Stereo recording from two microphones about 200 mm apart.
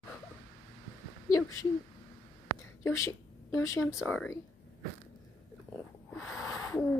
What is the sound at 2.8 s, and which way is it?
Speech, 15° left (ahead or behind).